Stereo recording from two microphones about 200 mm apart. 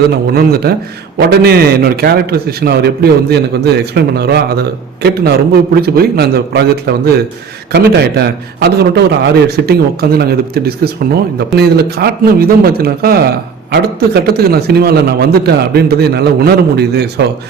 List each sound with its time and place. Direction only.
0.3 s a man's voice: 50° right (ahead or behind)